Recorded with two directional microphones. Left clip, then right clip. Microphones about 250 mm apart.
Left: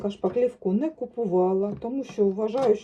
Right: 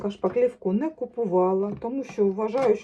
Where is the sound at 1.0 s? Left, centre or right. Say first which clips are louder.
Right 2 dB; right.